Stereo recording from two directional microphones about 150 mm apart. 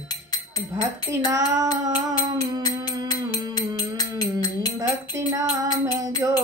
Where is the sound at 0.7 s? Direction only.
20° right (ahead or behind).